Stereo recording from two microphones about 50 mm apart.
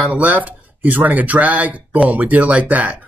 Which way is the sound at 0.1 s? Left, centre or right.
Right.